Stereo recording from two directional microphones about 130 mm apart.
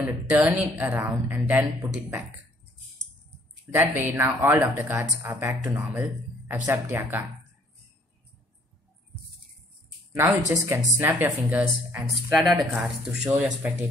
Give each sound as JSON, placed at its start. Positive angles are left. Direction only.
{"t": 0.0, "sound": "speech", "side_deg": -10}
{"t": 0.9, "sound": "speech", "side_deg": -25}
{"t": 1.9, "sound": "speech", "side_deg": -10}
{"t": 3.7, "sound": "speech", "side_deg": -15}
{"t": 10.1, "sound": "speech", "side_deg": -20}